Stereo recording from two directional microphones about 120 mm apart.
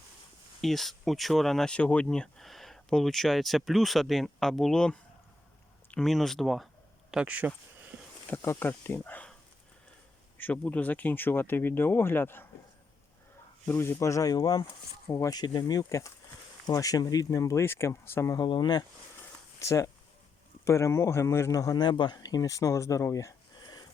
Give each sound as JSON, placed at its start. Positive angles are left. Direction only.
{"t": 0.6, "sound": "speech", "side_deg": 0}
{"t": 8.4, "sound": "speech", "side_deg": 20}
{"t": 10.3, "sound": "speech", "side_deg": 15}
{"t": 13.7, "sound": "speech", "side_deg": 20}
{"t": 18.3, "sound": "speech", "side_deg": 40}
{"t": 19.5, "sound": "speech", "side_deg": 25}